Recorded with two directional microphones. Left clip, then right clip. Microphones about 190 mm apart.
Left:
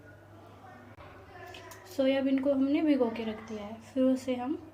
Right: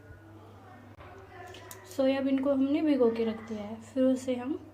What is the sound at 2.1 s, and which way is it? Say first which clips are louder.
A woman's voice: left 2 dB; 10° right (ahead or behind).